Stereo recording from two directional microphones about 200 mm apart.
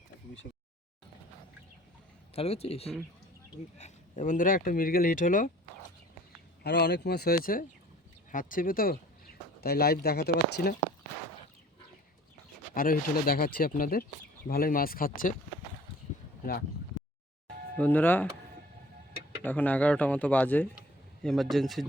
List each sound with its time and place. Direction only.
2.3 s speech: 30° left (ahead or behind)
6.6 s speech: 55° left (ahead or behind)
12.7 s speech: 45° left (ahead or behind)
16.4 s speech: 50° left (ahead or behind)
17.7 s speech: 10° left (ahead or behind)
19.4 s speech: 10° left (ahead or behind)